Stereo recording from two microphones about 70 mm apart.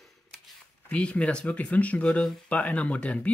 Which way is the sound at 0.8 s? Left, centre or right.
Centre.